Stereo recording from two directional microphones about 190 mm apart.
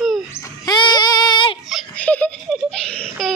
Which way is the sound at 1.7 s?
Centre (ahead or behind).